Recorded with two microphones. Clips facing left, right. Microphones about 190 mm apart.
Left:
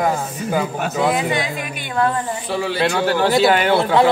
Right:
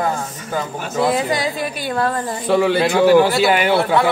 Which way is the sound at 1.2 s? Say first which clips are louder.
Right 2 dB; 35° right (ahead or behind).